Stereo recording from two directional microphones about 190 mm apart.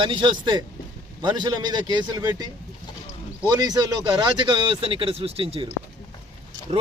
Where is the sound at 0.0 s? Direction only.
25° right (ahead or behind).